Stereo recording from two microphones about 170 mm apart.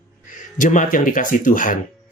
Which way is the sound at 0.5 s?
50° left (ahead or behind).